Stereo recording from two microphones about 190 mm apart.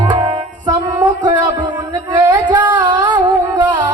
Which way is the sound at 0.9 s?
20° right (ahead or behind).